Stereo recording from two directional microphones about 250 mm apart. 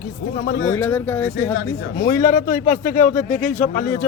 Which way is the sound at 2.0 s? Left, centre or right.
Left.